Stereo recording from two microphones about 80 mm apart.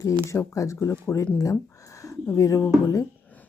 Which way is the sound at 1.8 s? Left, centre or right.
Left.